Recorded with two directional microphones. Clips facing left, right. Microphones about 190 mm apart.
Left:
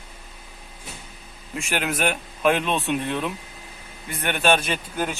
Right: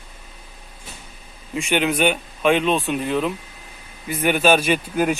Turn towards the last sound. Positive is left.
turn(degrees=-5)  # may be behind; listen again after turning